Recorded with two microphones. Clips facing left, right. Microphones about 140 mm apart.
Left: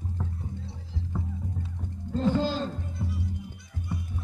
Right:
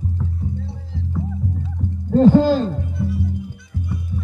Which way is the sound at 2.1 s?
65° right (ahead or behind).